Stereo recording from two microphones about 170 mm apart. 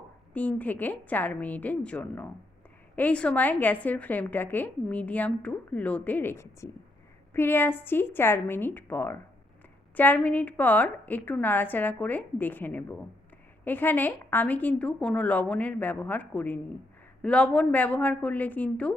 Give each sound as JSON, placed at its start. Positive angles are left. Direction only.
{"t": 0.3, "sound": "a woman's voice", "side_deg": 10}